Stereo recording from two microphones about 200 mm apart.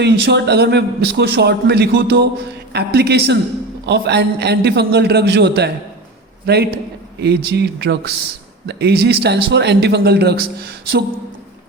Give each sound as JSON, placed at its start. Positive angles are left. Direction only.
{"t": 0.0, "sound": "a man's voice", "side_deg": -60}